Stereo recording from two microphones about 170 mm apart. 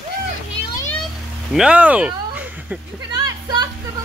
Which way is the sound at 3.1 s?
25° right (ahead or behind).